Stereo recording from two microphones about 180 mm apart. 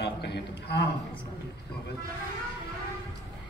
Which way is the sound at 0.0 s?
65° left (ahead or behind).